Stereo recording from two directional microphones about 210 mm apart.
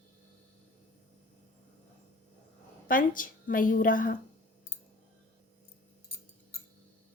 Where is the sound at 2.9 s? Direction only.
40° left (ahead or behind).